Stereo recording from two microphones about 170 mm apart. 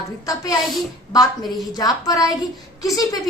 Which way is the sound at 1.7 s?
20° left (ahead or behind).